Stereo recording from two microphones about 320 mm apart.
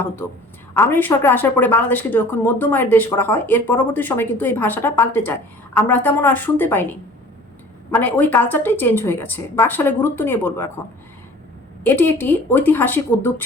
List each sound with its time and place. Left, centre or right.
0.7 s a woman's voice: centre
7.9 s a woman's voice: centre
11.8 s a woman's voice: centre